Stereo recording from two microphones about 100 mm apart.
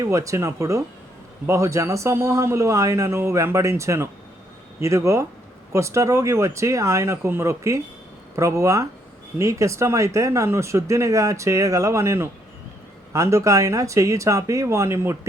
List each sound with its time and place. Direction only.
0.0 s speech: 30° right (ahead or behind)